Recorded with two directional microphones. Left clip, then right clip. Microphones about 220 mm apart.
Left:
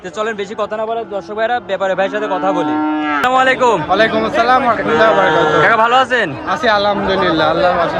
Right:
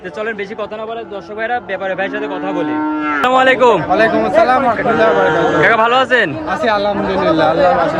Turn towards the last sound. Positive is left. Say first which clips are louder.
# right 1 dB
turn(degrees=0)  # may be behind; listen again after turning